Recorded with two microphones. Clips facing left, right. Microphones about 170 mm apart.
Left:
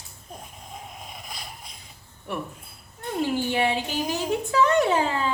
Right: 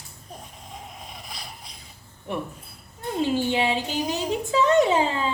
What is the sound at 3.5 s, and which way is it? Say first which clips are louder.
Child singing: even; 20° right (ahead or behind).